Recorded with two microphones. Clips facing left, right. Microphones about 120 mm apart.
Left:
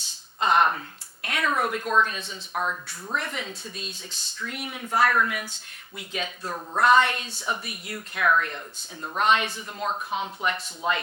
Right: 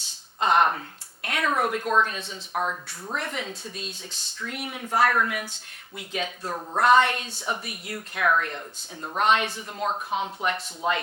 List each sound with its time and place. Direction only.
0.3 s a sound: 50° right (ahead or behind)
2.5 s speech: 35° right (ahead or behind)
3.2 s a woman's voice: 45° right (ahead or behind)
6.4 s speech: 35° right (ahead or behind)
6.8 s a woman's voice: 55° right (ahead or behind)
9.1 s a woman's voice: 55° right (ahead or behind)